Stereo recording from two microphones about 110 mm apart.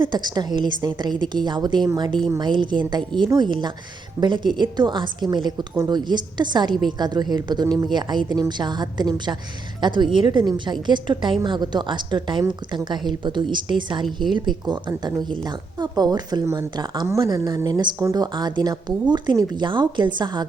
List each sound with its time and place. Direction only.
0.0 s a woman's voice: 40° right (ahead or behind)